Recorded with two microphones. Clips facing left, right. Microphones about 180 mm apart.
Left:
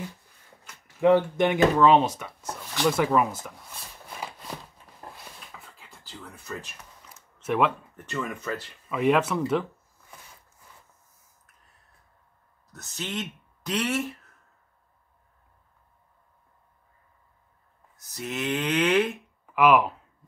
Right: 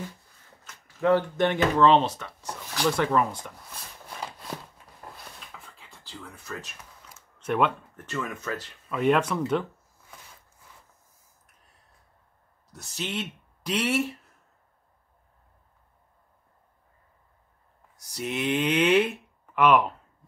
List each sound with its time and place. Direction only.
0.7 s speech: 15° left (ahead or behind)
2.7 s a sound: 5° left (ahead or behind)
6.2 s speech: centre (ahead or behind)
12.7 s speech: 10° right (ahead or behind)
17.9 s speech: 15° right (ahead or behind)
19.4 s speech: 5° left (ahead or behind)